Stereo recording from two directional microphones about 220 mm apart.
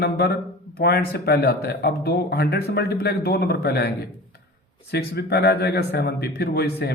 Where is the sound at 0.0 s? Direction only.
45° left (ahead or behind).